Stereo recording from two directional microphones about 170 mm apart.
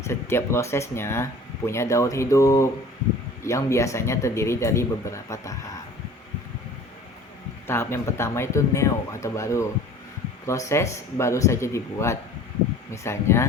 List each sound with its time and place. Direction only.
0.0 s speech: 15° left (ahead or behind)
7.7 s speech: 15° left (ahead or behind)